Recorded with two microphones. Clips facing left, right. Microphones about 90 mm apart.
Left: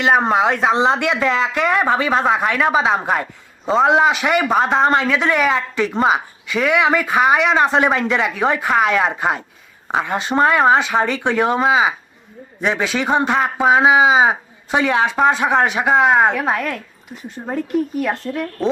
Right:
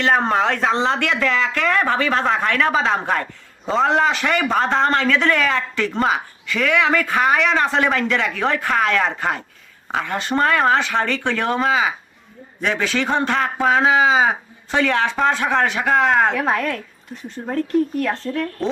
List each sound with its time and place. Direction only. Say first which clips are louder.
0.0 s a man's voice: left 2 dB; 15° left (ahead or behind)